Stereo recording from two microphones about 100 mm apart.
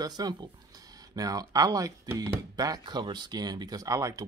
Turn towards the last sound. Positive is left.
turn(degrees=-35)  # may be behind; listen again after turning